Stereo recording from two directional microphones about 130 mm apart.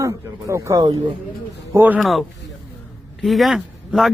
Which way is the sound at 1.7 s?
15° right (ahead or behind).